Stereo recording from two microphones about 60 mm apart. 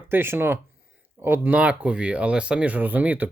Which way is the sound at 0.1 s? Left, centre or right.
Right.